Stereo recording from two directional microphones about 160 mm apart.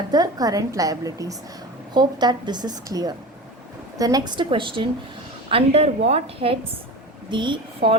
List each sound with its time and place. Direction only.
0.1 s a woman's voice: 25° right (ahead or behind)